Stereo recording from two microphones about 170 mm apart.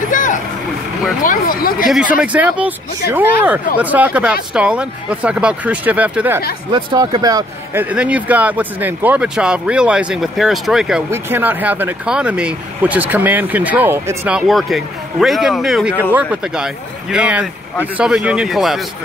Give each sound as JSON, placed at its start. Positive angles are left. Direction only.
{"t": 0.1, "sound": "vehicle", "side_deg": 50}
{"t": 1.2, "sound": "speech", "side_deg": 55}
{"t": 1.9, "sound": "a man's voice", "side_deg": -5}
{"t": 6.7, "sound": "speech", "side_deg": -25}
{"t": 7.8, "sound": "speech", "side_deg": -10}
{"t": 11.1, "sound": "speech", "side_deg": -15}
{"t": 14.5, "sound": "a man's voice", "side_deg": 0}